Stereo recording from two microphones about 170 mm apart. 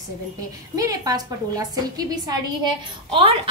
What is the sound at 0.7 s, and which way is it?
Speech, 20° right (ahead or behind).